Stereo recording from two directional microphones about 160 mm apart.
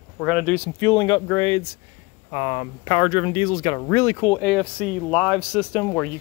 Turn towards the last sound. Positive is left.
turn(degrees=15)  # may be behind; listen again after turning